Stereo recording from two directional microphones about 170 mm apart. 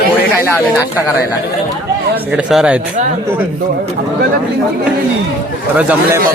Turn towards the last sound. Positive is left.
turn(degrees=-10)  # may be behind; listen again after turning